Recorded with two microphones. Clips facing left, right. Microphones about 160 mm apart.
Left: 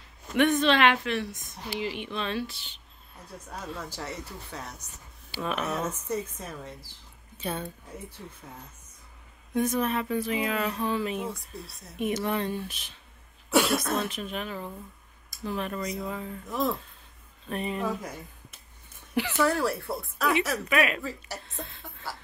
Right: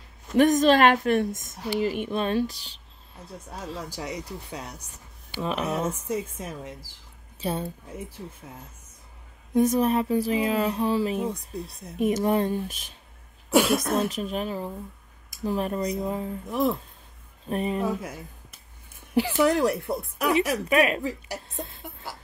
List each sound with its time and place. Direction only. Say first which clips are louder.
0.3 s speech: right 5 dB; 40° right (ahead or behind)
3.9 s speech: right 4 dB; 15° right (ahead or behind)
5.4 s speech: right 3 dB; 30° right (ahead or behind)
5.7 s speech: right 3 dB; 10° right (ahead or behind)
7.3 s speech: right 4 dB; 35° right (ahead or behind)
9.5 s speech: right 5 dB; 35° right (ahead or behind)
13.5 s speech: right 3 dB; 15° right (ahead or behind)
14.0 s speech: right 5 dB; 40° right (ahead or behind)
16.4 s speech: right 4 dB; 15° right (ahead or behind)
17.5 s speech: right 5 dB; 40° right (ahead or behind)
19.3 s speech: right 4 dB; 20° right (ahead or behind)
20.7 s speech: right 4 dB; 40° right (ahead or behind)
21.0 s speech: right 5 dB; 15° right (ahead or behind)